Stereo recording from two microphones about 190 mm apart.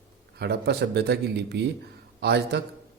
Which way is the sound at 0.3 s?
60° right (ahead or behind).